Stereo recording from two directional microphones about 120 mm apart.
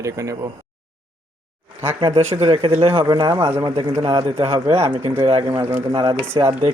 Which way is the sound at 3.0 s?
35° right (ahead or behind).